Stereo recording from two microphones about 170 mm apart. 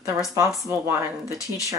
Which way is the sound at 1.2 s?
20° left (ahead or behind).